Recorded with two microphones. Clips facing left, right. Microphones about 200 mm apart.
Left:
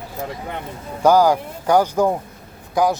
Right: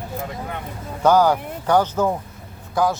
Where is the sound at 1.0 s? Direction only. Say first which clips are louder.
Left 2 dB; 10° left (ahead or behind).